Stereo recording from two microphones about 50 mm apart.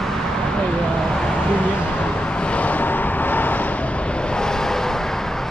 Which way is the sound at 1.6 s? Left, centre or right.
Left.